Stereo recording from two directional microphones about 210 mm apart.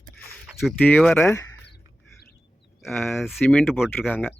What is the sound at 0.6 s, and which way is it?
Speech, 5° left (ahead or behind).